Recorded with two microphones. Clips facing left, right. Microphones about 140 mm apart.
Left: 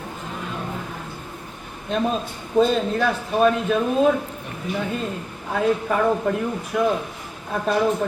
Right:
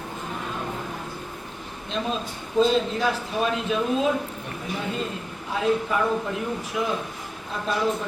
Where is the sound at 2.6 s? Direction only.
55° left (ahead or behind).